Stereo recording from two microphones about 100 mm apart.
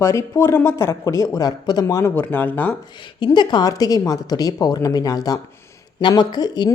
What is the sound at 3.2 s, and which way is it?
A woman's voice, 45° left (ahead or behind).